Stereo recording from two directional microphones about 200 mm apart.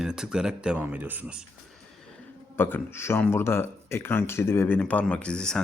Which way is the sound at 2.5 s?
10° left (ahead or behind).